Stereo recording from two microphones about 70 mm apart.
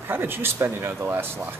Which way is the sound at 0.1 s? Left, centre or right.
Right.